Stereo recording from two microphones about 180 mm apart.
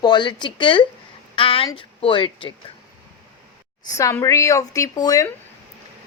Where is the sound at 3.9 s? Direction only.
15° left (ahead or behind).